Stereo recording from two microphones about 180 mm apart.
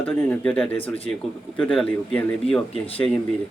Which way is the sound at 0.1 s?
10° left (ahead or behind).